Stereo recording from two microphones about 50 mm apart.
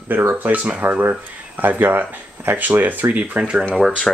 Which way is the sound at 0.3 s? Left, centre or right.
Right.